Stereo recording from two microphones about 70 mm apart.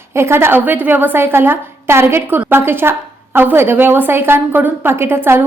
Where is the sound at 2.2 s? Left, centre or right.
Right.